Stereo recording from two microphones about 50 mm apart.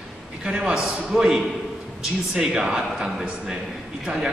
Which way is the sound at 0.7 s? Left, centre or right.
Centre.